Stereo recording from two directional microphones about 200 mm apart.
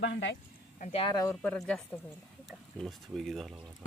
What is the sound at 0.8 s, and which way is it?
Speech, 40° left (ahead or behind).